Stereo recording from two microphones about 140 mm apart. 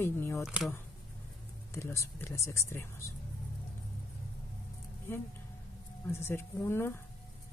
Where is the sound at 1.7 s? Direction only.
20° left (ahead or behind).